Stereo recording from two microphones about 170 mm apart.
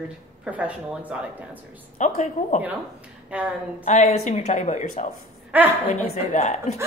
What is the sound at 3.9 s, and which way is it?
A woman's voice, 45° left (ahead or behind).